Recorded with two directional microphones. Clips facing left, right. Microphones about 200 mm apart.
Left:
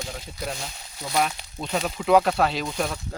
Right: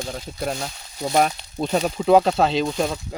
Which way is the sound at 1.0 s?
45° right (ahead or behind).